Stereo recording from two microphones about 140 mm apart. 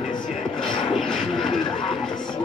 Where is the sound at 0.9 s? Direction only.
Centre (ahead or behind).